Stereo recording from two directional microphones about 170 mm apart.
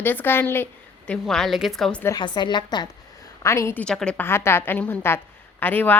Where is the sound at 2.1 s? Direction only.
25° left (ahead or behind).